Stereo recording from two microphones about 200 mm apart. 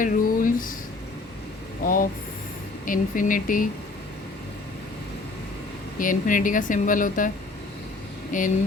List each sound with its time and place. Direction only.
0.0 s a sound: 45° left (ahead or behind)
1.8 s vehicle: 45° left (ahead or behind)
2.8 s speech: 40° left (ahead or behind)
6.0 s speech: 40° left (ahead or behind)
8.3 s speech: 40° left (ahead or behind)